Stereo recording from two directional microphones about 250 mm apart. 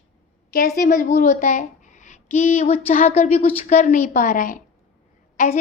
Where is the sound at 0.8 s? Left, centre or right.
Left.